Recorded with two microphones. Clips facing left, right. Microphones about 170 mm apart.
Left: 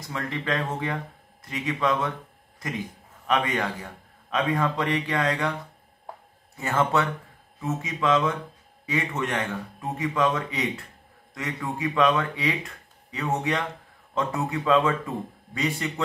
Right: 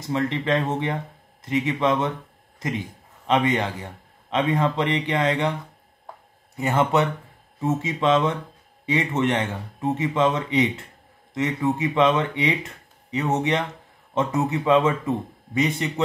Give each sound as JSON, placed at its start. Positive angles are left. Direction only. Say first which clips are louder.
{"t": 0.0, "sound": "speech", "louder": "right 7 dB", "side_deg": -25}
{"t": 3.3, "sound": "speech", "louder": "right 4 dB", "side_deg": -25}
{"t": 6.5, "sound": "speech", "louder": "right 3 dB", "side_deg": -20}